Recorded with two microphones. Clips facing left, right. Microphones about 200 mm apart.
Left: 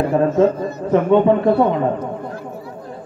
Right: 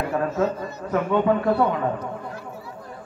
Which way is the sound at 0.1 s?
25° left (ahead or behind).